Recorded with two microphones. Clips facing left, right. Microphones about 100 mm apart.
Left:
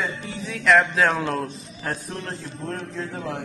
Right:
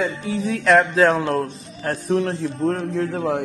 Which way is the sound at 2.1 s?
90° right.